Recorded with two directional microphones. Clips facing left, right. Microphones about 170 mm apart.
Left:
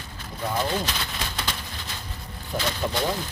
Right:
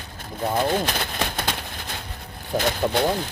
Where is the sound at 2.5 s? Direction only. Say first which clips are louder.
Right 5 dB; 50° right (ahead or behind).